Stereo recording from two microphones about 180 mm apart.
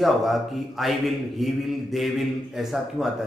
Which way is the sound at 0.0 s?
Centre (ahead or behind).